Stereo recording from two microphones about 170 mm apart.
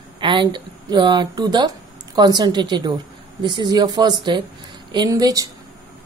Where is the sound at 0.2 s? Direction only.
30° right (ahead or behind).